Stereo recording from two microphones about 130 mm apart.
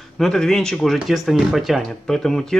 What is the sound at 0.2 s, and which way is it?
Speech, 5° left (ahead or behind).